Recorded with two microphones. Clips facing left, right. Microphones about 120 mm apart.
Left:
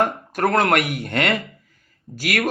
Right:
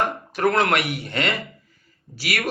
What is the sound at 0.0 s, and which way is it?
Speech, 45° left (ahead or behind).